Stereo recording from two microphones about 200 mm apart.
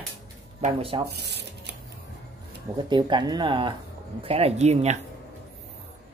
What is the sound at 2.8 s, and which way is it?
Speech, 20° right (ahead or behind).